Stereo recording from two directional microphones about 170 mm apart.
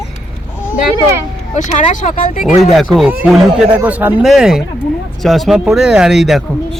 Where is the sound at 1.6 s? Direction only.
45° left (ahead or behind).